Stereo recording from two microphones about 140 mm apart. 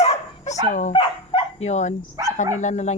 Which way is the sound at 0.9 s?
45° left (ahead or behind).